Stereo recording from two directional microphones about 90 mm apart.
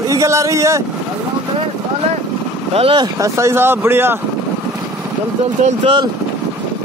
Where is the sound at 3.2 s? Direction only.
30° right (ahead or behind).